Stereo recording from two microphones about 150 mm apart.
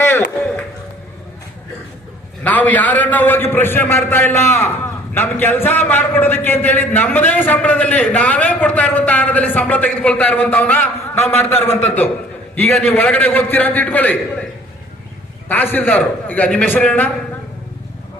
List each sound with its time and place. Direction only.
0.0 s a sound: 15° left (ahead or behind)
2.4 s a man's voice: 10° left (ahead or behind)
15.4 s a man's voice: 10° left (ahead or behind)